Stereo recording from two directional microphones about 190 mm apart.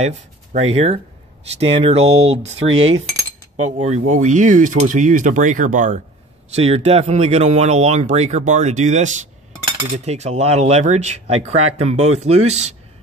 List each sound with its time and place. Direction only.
0.0 s speech: 35° right (ahead or behind)
2.7 s cutlery: 90° right
3.7 s speech: 40° right (ahead or behind)